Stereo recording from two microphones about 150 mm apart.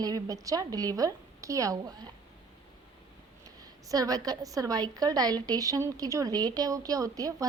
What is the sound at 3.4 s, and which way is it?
A woman's voice, 25° right (ahead or behind).